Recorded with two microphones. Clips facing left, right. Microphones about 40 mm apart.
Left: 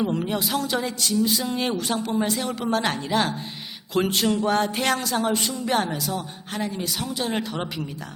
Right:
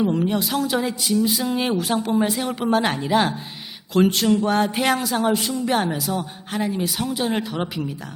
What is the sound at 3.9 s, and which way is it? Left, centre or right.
Speech, centre.